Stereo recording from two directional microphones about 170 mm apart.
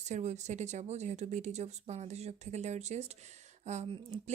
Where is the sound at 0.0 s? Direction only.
45° right (ahead or behind).